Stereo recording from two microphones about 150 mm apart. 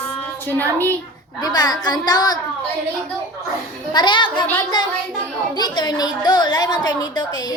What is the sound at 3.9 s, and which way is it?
Speech, 30° left (ahead or behind).